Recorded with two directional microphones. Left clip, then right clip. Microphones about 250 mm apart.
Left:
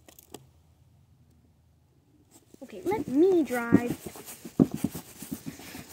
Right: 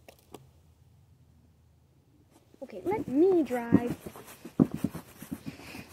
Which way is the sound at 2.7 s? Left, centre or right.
Left.